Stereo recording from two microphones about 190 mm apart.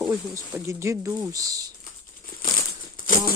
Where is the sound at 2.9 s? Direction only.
45° left (ahead or behind).